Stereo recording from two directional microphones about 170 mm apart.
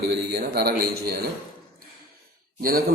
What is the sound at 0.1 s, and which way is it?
A man's voice, 70° right (ahead or behind).